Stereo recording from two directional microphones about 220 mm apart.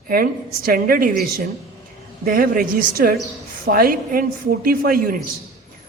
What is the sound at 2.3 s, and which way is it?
A woman's voice, 40° right (ahead or behind).